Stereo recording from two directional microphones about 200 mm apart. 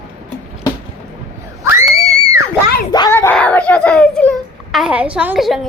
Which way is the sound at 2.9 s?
20° left (ahead or behind).